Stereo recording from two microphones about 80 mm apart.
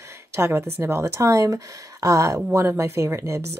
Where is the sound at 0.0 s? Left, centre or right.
Right.